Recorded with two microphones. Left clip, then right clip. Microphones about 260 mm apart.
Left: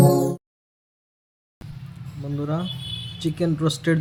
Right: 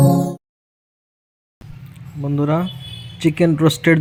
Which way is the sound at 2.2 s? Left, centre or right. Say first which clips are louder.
Right 9 dB; centre.